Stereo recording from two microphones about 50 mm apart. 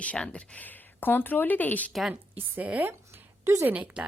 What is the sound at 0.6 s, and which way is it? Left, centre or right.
A woman's voice, left.